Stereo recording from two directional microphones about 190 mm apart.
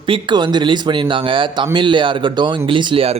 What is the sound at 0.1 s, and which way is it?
A man's voice, 25° right (ahead or behind).